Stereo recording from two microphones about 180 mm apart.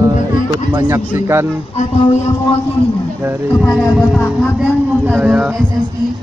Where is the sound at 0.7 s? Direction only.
20° right (ahead or behind).